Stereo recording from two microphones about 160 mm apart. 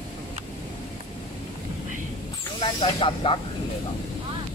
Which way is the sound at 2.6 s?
30° left (ahead or behind).